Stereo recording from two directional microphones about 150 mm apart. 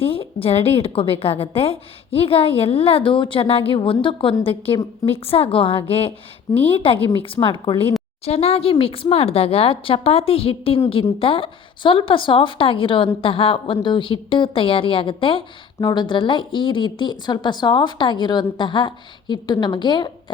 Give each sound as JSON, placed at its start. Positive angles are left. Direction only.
{"t": 0.0, "sound": "a woman's voice", "side_deg": 40}